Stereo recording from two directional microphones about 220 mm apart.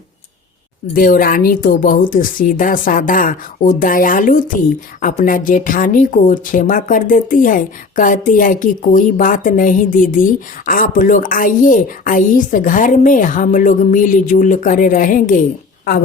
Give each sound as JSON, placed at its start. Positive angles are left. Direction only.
{"t": 0.9, "sound": "a woman's voice", "side_deg": 40}